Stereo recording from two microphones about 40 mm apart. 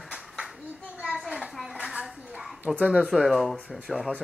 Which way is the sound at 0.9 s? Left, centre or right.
Right.